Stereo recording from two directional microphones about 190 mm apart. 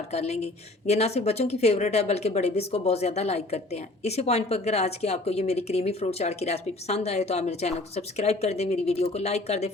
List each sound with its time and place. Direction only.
0.1 s a woman's voice: 35° left (ahead or behind)